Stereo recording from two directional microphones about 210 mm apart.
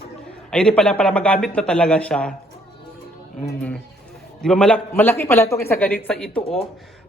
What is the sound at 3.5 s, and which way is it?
A man's voice, 5° left (ahead or behind).